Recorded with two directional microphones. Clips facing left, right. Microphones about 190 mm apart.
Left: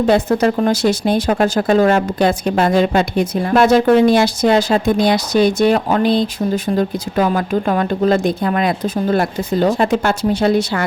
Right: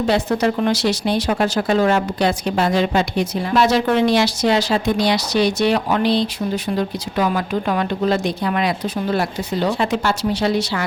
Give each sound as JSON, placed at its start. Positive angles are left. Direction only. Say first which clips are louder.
{"t": 0.1, "sound": "speech", "louder": "left 4 dB", "side_deg": 50}